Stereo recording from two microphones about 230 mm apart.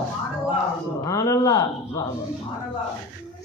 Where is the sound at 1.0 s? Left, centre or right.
Centre.